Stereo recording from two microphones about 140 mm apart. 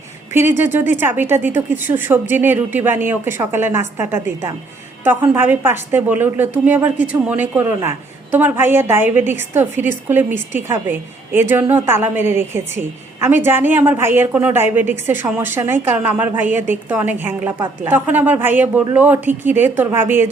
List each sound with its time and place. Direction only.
0.6 s a woman's voice: 15° right (ahead or behind)